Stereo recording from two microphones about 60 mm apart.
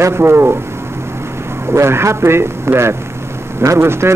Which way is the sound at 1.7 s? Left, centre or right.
Right.